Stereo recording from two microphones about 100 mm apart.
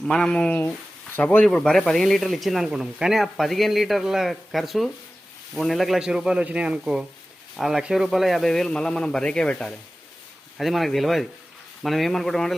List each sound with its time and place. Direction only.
0.0 s speech: 5° left (ahead or behind)
1.5 s speech: 5° left (ahead or behind)